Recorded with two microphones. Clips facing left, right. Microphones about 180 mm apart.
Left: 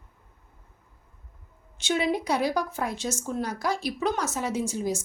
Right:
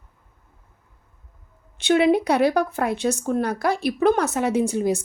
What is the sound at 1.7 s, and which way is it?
Speech, 60° right (ahead or behind).